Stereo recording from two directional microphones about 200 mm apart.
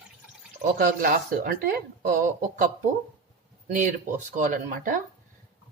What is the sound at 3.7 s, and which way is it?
Speech, 40° right (ahead or behind).